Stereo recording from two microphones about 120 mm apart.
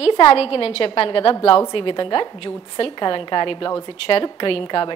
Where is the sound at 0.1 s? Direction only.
45° left (ahead or behind).